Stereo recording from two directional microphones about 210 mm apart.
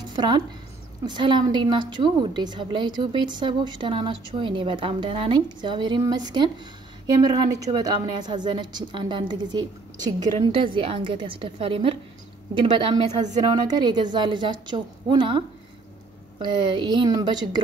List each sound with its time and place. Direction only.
0.1 s a woman's voice: 20° right (ahead or behind)